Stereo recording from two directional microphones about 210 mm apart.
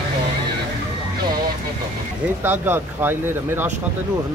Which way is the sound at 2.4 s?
10° right (ahead or behind).